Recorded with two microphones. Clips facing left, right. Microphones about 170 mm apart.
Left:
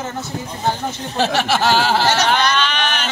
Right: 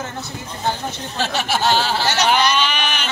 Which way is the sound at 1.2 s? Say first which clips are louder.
Left 2 dB; 75° left (ahead or behind).